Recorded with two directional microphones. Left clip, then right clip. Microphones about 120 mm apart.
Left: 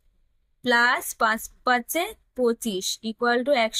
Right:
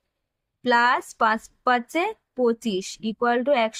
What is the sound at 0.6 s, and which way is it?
Speech, 35° right (ahead or behind).